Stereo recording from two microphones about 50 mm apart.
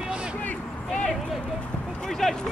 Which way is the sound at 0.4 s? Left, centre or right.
Left.